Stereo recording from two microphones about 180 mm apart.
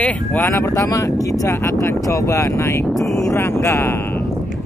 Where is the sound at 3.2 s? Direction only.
15° left (ahead or behind).